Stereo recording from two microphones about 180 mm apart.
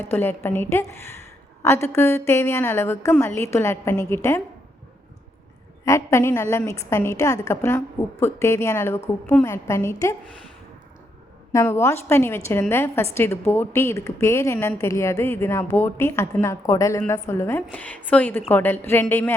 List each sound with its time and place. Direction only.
0.0 s a woman's voice: 10° left (ahead or behind)
5.8 s a woman's voice: 15° left (ahead or behind)
11.5 s a woman's voice: 15° left (ahead or behind)